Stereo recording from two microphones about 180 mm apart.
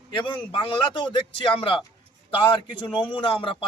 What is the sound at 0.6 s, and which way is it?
Speech, 30° left (ahead or behind).